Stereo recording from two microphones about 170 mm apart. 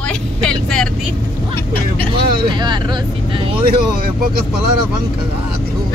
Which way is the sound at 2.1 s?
25° right (ahead or behind).